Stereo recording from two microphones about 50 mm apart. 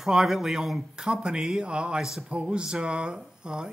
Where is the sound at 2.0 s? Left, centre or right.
Centre.